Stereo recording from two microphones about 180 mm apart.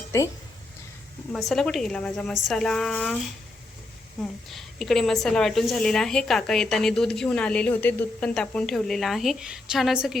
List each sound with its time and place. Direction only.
1.3 s a woman's voice: centre (ahead or behind)
4.2 s a woman's voice: centre (ahead or behind)